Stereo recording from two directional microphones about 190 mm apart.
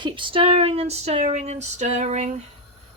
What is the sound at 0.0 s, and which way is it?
Speech, 25° right (ahead or behind).